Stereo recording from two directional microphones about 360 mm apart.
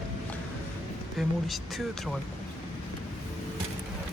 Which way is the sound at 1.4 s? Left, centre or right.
Centre.